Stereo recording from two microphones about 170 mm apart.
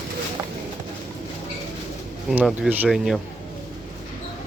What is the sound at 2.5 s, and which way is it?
Speech, centre (ahead or behind).